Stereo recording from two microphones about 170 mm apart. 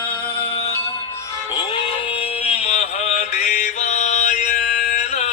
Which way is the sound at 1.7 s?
35° left (ahead or behind).